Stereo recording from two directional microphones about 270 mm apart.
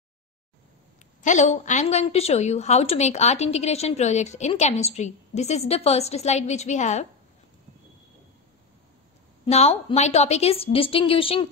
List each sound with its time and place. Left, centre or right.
1.2 s a woman's voice: left
9.5 s a woman's voice: left